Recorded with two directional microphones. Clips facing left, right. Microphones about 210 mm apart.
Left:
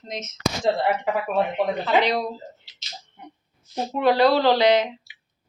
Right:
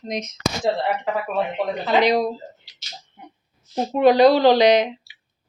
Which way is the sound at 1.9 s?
15° right (ahead or behind).